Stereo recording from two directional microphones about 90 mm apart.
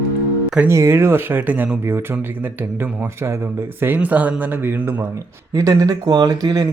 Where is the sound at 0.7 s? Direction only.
30° right (ahead or behind).